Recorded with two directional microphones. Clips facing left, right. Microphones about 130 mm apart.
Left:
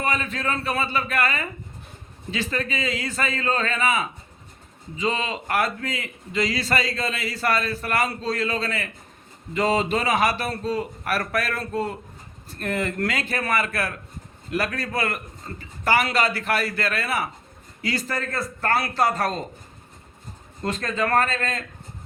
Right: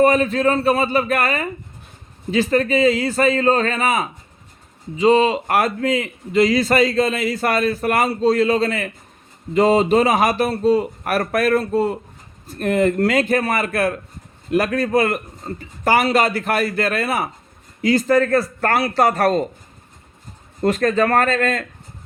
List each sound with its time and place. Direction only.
0.0 s a man's voice: 40° right (ahead or behind)
18.9 s speech: 60° right (ahead or behind)
20.7 s speech: 65° right (ahead or behind)